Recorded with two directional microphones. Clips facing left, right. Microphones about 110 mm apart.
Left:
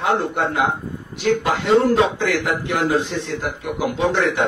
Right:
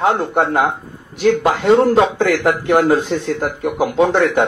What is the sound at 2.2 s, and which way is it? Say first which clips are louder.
Speech: right 5 dB; 50° right (ahead or behind).